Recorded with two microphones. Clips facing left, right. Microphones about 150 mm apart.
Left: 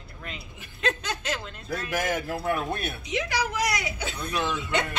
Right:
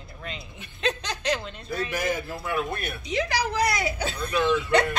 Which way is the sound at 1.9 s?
90° left.